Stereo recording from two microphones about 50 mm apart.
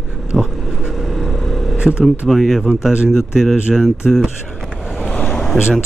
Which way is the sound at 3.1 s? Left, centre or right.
Centre.